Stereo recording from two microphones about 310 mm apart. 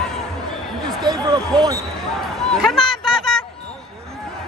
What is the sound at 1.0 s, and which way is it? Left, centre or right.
Speech, centre.